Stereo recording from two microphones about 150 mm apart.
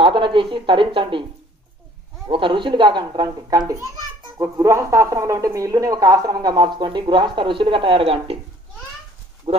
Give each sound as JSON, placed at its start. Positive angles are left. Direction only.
{"t": 0.0, "sound": "speech", "side_deg": -35}
{"t": 2.2, "sound": "a child's voice", "side_deg": -35}
{"t": 9.5, "sound": "speech", "side_deg": -45}